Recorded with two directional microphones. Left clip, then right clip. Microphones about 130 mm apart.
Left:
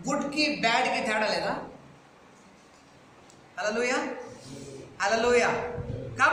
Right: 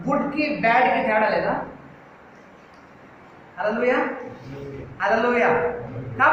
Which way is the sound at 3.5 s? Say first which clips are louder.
Right 6 dB; 30° left (ahead or behind).